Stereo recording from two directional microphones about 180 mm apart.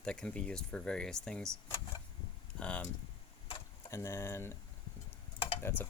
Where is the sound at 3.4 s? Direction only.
30° left (ahead or behind).